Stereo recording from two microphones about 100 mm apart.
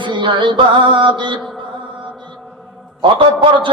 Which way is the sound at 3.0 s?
55° right (ahead or behind).